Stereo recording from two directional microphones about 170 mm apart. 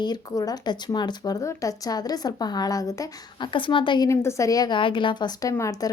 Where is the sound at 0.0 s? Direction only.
25° left (ahead or behind).